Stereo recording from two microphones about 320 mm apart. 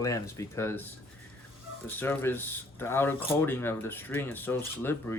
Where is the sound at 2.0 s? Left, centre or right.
Centre.